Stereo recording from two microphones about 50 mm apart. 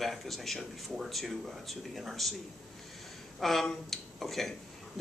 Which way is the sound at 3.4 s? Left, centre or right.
Centre.